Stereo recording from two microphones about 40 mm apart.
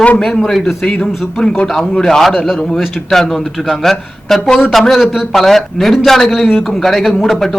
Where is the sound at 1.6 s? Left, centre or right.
Centre.